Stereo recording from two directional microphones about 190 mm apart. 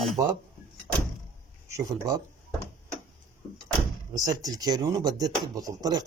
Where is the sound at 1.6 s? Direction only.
15° right (ahead or behind).